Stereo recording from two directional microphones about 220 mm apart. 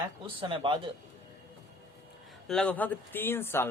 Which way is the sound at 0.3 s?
20° right (ahead or behind).